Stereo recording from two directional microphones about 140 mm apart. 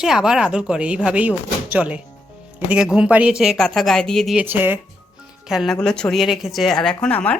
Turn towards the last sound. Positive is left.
turn(degrees=10)  # may be behind; listen again after turning